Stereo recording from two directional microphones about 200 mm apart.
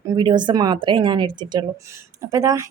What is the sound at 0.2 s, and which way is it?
A woman's voice, 20° right (ahead or behind).